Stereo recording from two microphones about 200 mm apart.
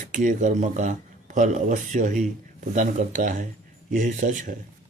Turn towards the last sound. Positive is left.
turn(degrees=-40)  # may be behind; listen again after turning